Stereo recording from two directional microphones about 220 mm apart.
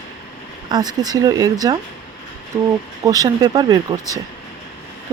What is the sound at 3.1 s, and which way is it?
Speech, 15° right (ahead or behind).